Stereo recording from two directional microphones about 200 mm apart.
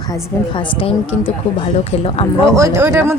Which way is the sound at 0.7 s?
25° left (ahead or behind).